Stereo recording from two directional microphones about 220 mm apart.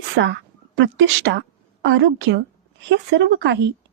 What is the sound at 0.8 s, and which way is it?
A woman's voice, 55° right (ahead or behind).